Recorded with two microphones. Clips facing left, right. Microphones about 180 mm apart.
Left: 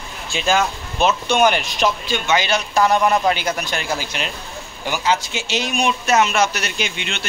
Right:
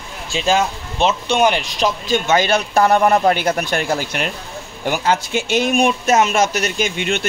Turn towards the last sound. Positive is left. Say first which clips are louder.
# right 6 dB
turn(degrees=-50)  # may be behind; listen again after turning